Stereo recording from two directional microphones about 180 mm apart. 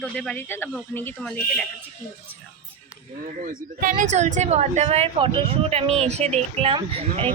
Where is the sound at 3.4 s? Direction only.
50° right (ahead or behind).